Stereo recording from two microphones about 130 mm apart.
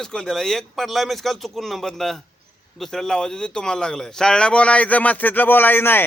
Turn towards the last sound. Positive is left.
turn(degrees=15)  # may be behind; listen again after turning